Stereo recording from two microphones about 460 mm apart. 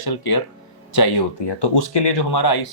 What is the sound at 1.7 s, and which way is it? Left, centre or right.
Speech, left.